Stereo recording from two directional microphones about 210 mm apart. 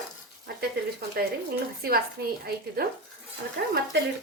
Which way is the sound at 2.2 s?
50° right (ahead or behind).